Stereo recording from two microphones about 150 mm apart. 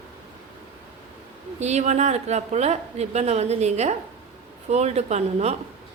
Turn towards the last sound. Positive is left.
turn(degrees=-45)  # may be behind; listen again after turning